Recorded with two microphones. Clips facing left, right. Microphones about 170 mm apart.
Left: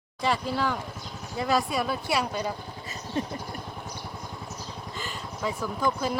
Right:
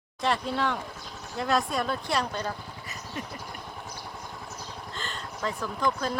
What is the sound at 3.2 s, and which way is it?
Vehicle, 30° left (ahead or behind).